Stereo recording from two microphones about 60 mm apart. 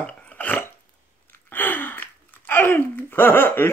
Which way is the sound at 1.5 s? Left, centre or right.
Left.